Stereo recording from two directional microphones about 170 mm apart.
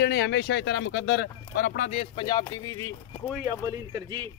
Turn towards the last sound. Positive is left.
turn(degrees=-25)  # may be behind; listen again after turning